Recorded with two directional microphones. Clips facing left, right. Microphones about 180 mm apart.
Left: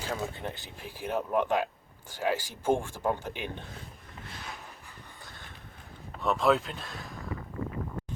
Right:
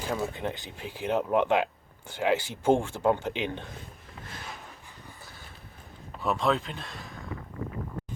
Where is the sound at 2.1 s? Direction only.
15° right (ahead or behind).